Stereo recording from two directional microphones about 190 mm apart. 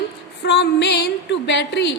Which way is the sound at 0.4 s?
65° left (ahead or behind).